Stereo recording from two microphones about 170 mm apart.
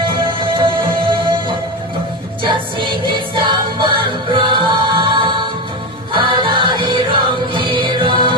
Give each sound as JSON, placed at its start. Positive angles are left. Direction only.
{"t": 0.3, "sound": "music", "side_deg": -30}
{"t": 2.4, "sound": "music", "side_deg": -30}